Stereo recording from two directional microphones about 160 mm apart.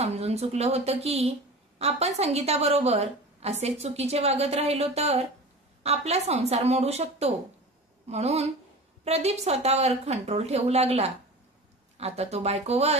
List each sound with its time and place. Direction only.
0.0 s a woman's voice: 40° right (ahead or behind)